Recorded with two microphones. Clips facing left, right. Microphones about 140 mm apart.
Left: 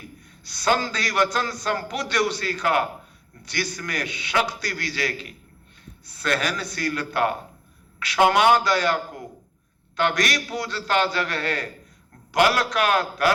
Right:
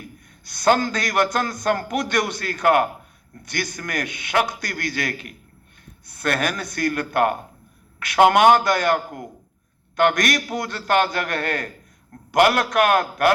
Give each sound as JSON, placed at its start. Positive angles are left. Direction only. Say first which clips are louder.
{"t": 0.4, "sound": "a man's voice", "louder": "right 4 dB", "side_deg": -50}